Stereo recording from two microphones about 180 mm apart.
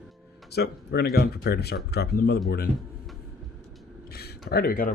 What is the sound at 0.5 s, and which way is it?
Speech, 65° left (ahead or behind).